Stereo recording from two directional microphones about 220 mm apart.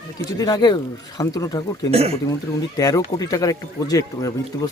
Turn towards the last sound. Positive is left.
turn(degrees=15)  # may be behind; listen again after turning